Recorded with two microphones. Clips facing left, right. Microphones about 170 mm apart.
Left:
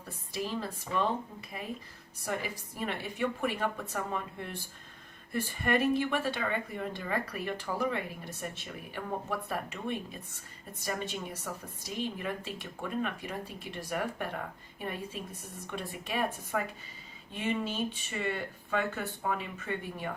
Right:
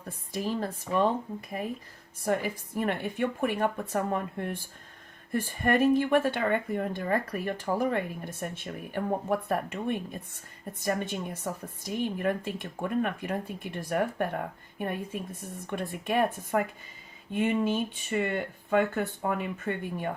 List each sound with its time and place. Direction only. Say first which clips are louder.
0.3 s speech: right 4 dB; 45° right (ahead or behind)